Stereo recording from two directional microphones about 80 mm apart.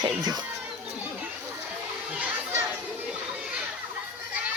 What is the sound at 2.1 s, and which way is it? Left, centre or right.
Chatter, centre.